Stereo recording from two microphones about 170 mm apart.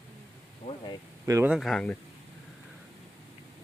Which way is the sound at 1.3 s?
15° right (ahead or behind).